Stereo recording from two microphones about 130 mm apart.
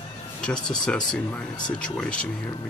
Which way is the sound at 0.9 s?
10° left (ahead or behind).